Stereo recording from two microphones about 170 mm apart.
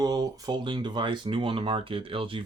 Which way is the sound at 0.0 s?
25° right (ahead or behind).